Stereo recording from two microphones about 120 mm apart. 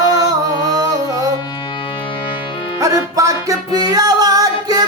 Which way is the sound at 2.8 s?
25° right (ahead or behind).